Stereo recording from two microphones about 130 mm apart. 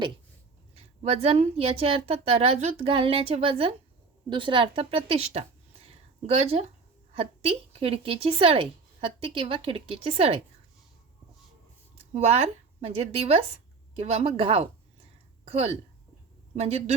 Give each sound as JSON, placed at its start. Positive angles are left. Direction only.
{"t": 0.8, "sound": "a woman's voice", "side_deg": -50}
{"t": 12.1, "sound": "a woman's voice", "side_deg": -55}